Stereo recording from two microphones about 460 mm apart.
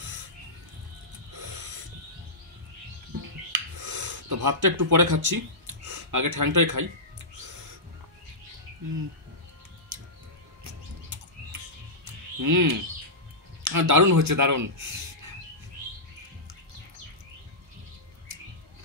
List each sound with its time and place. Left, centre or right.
1.3 s owl: right
3.2 s a sound: right
10.6 s bird: right
12.4 s speech: right